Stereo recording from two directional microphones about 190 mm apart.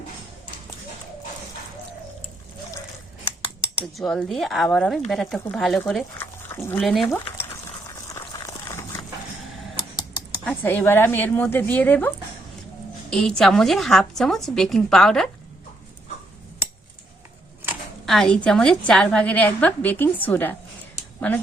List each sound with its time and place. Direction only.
3.9 s speech: centre (ahead or behind)
6.8 s speech: centre (ahead or behind)
7.9 s boiling: 15° left (ahead or behind)
8.2 s a sound: 20° left (ahead or behind)
10.4 s a woman's voice: 10° left (ahead or behind)
18.0 s a woman's voice: centre (ahead or behind)